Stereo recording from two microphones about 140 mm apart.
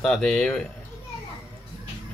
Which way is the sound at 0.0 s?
5° left (ahead or behind).